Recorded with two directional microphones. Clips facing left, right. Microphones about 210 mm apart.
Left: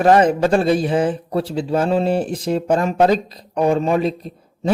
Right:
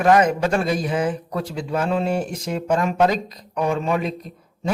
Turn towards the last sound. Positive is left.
turn(degrees=30)  # may be behind; listen again after turning